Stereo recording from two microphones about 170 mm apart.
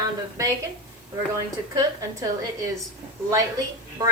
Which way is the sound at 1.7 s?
20° right (ahead or behind).